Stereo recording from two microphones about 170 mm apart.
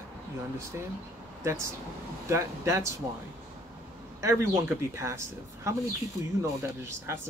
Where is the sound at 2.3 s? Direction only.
15° right (ahead or behind).